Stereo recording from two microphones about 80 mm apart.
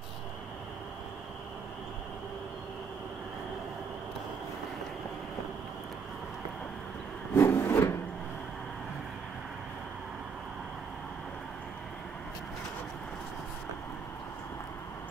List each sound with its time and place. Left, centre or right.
7.3 s wood: left